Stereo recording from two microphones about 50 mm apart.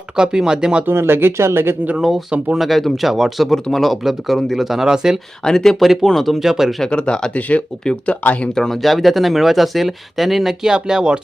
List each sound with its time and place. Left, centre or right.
0.2 s speech: centre
0.9 s speech: right
2.0 s speech: centre
5.4 s speech: centre
5.8 s speech: centre
6.4 s speech: centre
6.8 s speech: centre
7.3 s speech: left
7.9 s speech: centre